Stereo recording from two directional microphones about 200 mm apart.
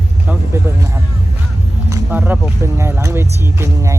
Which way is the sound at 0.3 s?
15° right (ahead or behind).